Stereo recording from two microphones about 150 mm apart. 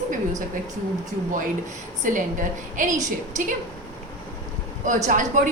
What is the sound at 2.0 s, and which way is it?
Speech, 60° right (ahead or behind).